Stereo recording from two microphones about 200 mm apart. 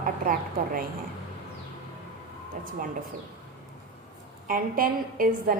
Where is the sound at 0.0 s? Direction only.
45° right (ahead or behind).